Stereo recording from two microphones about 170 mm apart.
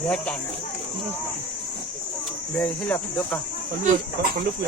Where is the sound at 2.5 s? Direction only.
10° left (ahead or behind).